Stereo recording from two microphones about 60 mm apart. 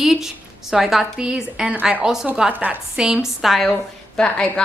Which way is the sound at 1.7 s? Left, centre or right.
Centre.